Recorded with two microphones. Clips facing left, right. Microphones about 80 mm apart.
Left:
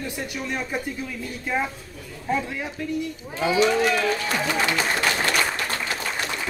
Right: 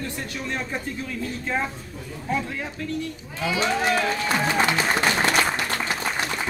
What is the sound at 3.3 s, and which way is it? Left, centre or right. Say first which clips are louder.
Speech: left 4 dB; left.